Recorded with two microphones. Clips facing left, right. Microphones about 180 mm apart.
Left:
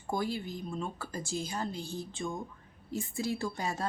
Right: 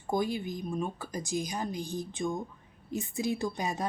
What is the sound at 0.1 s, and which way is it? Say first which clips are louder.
Speech: right 3 dB; 15° right (ahead or behind).